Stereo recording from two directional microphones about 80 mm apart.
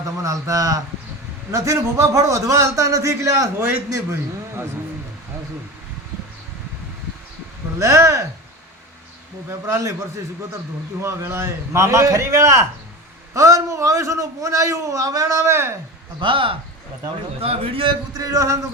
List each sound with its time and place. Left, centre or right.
0.2 s a man's voice: right
7.8 s a man's voice: right
9.5 s a man's voice: right
11.0 s a man's voice: right
16.2 s speech: right
18.1 s speech: right